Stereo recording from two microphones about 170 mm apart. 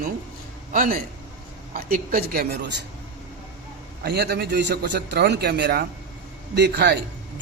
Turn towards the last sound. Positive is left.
turn(degrees=-75)  # may be behind; listen again after turning